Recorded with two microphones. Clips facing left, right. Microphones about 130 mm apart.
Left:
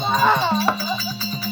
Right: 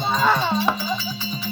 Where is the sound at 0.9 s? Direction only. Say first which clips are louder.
Even; 5° left (ahead or behind).